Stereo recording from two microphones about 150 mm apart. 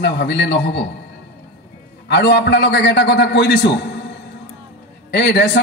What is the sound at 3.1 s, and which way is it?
Speech, 90° left.